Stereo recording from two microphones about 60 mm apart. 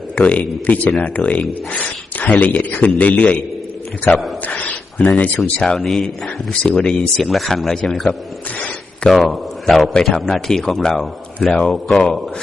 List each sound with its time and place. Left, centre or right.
0.2 s speech: left
4.4 s speech: left
5.5 s a man's voice: centre